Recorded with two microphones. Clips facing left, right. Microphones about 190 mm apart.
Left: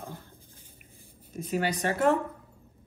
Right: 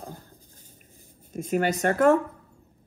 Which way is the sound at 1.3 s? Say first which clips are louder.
Right 4 dB; 50° right (ahead or behind).